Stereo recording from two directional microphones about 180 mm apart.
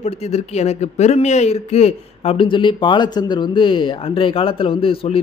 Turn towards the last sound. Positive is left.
turn(degrees=30)  # may be behind; listen again after turning